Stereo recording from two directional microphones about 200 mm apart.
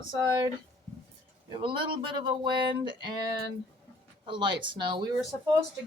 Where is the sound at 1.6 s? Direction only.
25° right (ahead or behind).